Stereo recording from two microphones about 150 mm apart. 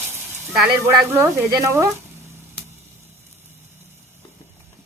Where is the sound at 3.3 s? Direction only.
15° right (ahead or behind).